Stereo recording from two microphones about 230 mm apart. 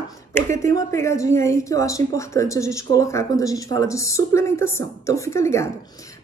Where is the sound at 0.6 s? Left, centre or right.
Centre.